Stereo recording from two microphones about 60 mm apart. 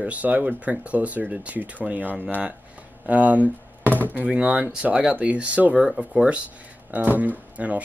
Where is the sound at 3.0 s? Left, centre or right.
Right.